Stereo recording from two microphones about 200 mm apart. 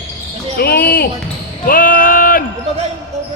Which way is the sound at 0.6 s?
50° left (ahead or behind).